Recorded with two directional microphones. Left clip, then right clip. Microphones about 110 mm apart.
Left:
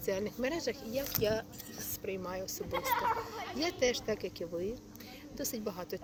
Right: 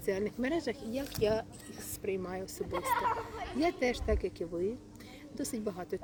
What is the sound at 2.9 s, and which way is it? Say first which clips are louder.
Speech: right 1 dB; 30° left (ahead or behind).